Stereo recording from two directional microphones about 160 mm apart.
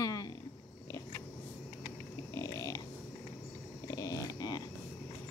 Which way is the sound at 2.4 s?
20° left (ahead or behind).